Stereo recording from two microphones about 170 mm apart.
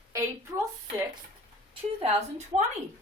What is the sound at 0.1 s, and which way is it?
Speech, 20° right (ahead or behind).